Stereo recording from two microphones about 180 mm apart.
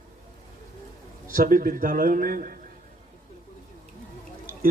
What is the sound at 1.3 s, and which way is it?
A man's voice, 50° right (ahead or behind).